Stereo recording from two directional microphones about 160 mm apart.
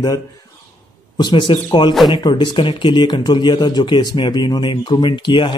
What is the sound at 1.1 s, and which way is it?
Speech, 30° left (ahead or behind).